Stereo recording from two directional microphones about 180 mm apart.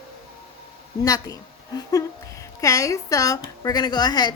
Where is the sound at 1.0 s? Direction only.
20° left (ahead or behind).